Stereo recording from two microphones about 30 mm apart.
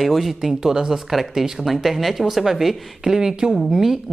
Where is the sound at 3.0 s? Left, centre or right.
Centre.